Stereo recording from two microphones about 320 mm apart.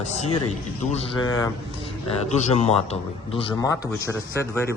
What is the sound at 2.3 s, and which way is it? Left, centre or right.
A man's voice, left.